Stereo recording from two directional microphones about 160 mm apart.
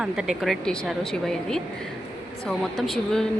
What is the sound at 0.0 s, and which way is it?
Speech, 5° right (ahead or behind).